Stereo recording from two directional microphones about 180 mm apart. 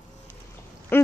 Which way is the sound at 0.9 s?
10° left (ahead or behind).